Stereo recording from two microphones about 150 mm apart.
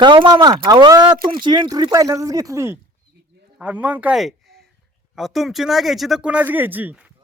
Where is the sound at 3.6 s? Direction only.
10° right (ahead or behind).